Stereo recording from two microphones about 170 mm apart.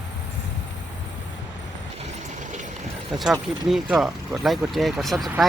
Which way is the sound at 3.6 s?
Centre (ahead or behind).